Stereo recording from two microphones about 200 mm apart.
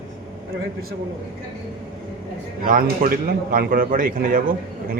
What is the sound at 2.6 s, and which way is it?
Speech, 45° right (ahead or behind).